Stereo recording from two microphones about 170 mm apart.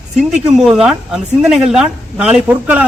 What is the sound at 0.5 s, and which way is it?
A man's voice, 5° right (ahead or behind).